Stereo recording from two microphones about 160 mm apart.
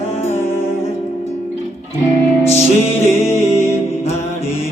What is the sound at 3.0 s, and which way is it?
Music, 40° left (ahead or behind).